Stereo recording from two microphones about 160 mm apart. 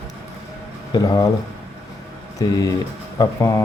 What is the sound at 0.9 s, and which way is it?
Speech, 25° left (ahead or behind).